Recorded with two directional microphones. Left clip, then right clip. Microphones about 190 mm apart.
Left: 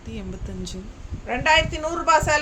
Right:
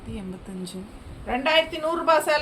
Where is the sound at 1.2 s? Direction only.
20° left (ahead or behind).